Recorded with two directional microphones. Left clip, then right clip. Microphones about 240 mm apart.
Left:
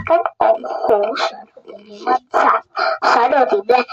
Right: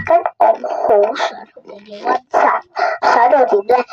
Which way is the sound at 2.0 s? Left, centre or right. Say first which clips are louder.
Right 1 dB; left.